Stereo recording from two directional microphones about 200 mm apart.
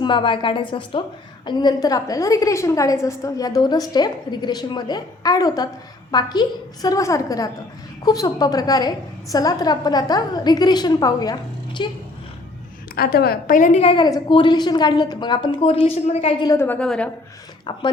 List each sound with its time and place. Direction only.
0.0 s a woman's voice: 25° left (ahead or behind)
13.0 s a woman's voice: 50° left (ahead or behind); by 16.5 s 30° left (ahead or behind)
16.5 s a woman's voice: 10° left (ahead or behind)
17.7 s a woman's voice: 20° left (ahead or behind)